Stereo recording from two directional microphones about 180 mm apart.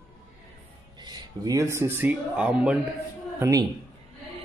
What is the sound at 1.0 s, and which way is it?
Speech, 20° right (ahead or behind).